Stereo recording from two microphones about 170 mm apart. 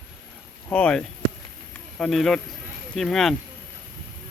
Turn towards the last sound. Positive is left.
turn(degrees=0)  # may be behind; listen again after turning